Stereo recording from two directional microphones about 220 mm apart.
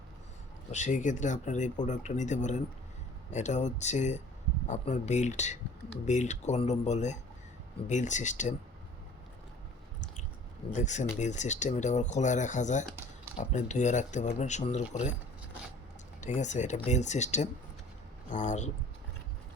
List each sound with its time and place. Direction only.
0.7 s speech: 35° left (ahead or behind)
10.7 s speech: 35° left (ahead or behind)
16.2 s speech: 35° left (ahead or behind)